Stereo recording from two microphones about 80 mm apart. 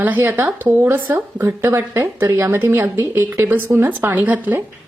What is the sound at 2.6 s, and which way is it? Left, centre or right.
A woman's voice, right.